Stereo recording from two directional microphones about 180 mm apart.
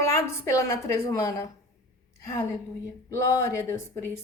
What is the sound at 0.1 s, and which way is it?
A woman's voice, 15° left (ahead or behind).